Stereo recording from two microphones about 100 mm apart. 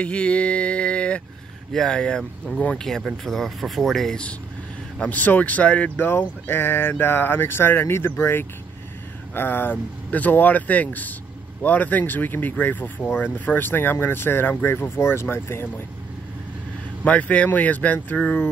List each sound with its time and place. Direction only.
0.0 s a sound: 10° left (ahead or behind)
1.7 s speech: 5° left (ahead or behind); by 15.6 s 25° left (ahead or behind)
17.0 s speech: 15° left (ahead or behind)